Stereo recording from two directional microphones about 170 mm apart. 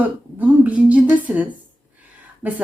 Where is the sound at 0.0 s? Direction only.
10° right (ahead or behind).